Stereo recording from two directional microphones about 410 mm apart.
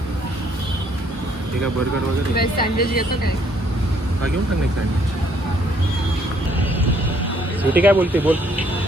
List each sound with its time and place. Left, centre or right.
2.3 s speech: left
7.6 s speech: centre